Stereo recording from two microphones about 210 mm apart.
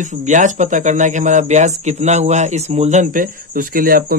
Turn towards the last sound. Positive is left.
turn(degrees=-45)  # may be behind; listen again after turning